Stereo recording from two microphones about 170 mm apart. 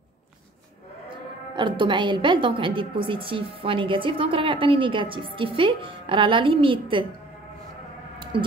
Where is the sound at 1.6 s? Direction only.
30° right (ahead or behind).